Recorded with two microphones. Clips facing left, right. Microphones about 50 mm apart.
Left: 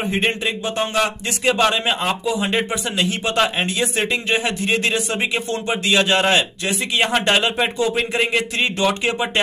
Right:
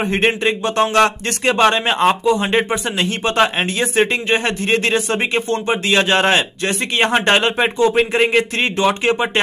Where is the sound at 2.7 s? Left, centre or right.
Right.